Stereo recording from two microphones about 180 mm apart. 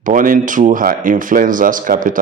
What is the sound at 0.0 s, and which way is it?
Speech, 50° right (ahead or behind).